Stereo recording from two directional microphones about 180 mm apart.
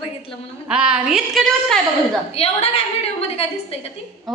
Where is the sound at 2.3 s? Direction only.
35° left (ahead or behind).